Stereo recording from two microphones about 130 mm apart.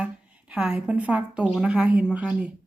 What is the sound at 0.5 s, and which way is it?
Speech, 5° right (ahead or behind).